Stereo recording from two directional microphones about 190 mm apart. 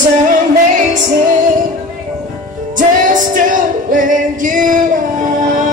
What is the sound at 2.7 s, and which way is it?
Music, 45° right (ahead or behind).